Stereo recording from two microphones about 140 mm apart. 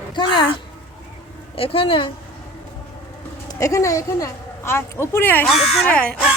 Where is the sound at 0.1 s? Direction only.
35° left (ahead or behind).